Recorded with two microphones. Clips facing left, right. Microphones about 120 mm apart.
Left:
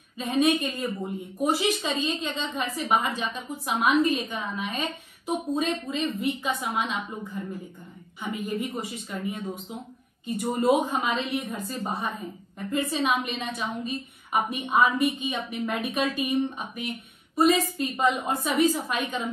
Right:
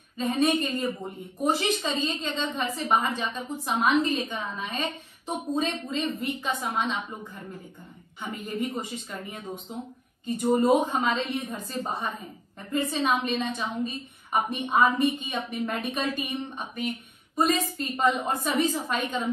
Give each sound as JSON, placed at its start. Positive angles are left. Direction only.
{"t": 0.9, "sound": "a woman's voice", "side_deg": 0}